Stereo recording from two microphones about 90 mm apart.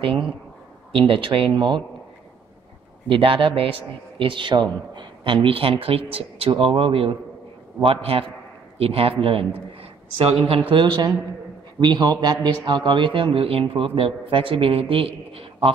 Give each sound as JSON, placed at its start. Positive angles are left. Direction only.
{"t": 0.0, "sound": "a man's voice", "side_deg": -80}
{"t": 3.1, "sound": "a man's voice", "side_deg": -80}
{"t": 10.7, "sound": "a man's voice", "side_deg": -60}